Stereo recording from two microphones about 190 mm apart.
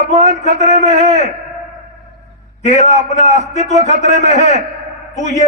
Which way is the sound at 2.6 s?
40° left (ahead or behind).